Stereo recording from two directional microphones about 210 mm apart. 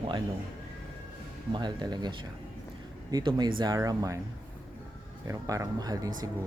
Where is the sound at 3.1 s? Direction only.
20° right (ahead or behind).